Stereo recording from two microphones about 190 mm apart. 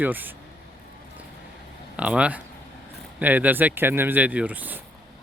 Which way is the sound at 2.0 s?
5° right (ahead or behind).